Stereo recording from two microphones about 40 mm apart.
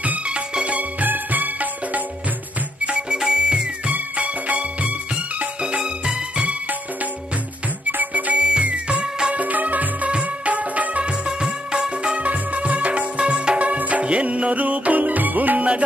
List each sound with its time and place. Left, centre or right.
0.3 s music: right
0.7 s music: right
2.8 s music: right
3.9 s music: right
5.6 s music: right
7.8 s music: right
8.4 s music: right
9.3 s music: right
10.0 s music: right
11.2 s music: centre
12.2 s music: right